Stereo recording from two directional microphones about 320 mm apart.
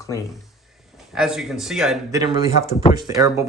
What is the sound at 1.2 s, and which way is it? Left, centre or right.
Speech, centre.